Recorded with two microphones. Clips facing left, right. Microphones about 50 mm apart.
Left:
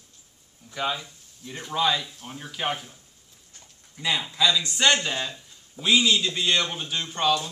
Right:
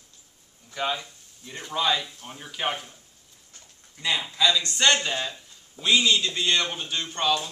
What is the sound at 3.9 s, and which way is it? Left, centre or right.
A man's voice, centre.